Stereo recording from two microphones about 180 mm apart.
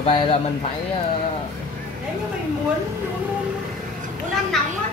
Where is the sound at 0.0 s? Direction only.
30° left (ahead or behind).